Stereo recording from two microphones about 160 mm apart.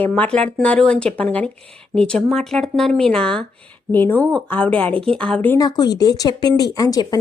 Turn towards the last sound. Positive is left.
turn(degrees=20)  # may be behind; listen again after turning